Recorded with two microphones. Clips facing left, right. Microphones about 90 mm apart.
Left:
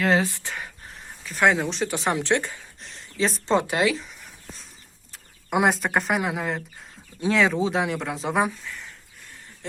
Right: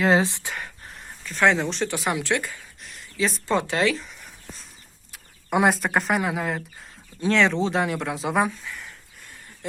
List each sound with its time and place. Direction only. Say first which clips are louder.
0.0 s speech: right 2 dB; 25° right (ahead or behind)
1.2 s speech: even; 10° left (ahead or behind)
2.0 s speech: left 4 dB; 35° left (ahead or behind)
2.2 s speech: left 2 dB; 25° left (ahead or behind)
3.4 s speech: left 1 dB; 20° left (ahead or behind)
3.9 s a sound: even; centre (ahead or behind)
5.1 s speech: right 1 dB; centre (ahead or behind)
8.6 s a sound: right 1 dB; 10° right (ahead or behind)